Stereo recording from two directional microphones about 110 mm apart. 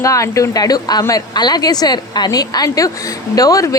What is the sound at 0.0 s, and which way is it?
A woman's voice, 30° left (ahead or behind).